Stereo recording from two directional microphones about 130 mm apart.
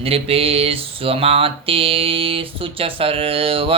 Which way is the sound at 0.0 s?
50° right (ahead or behind).